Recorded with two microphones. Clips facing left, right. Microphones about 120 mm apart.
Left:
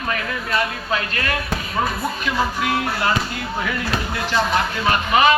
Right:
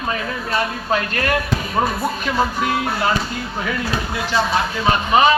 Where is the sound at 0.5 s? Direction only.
40° right (ahead or behind).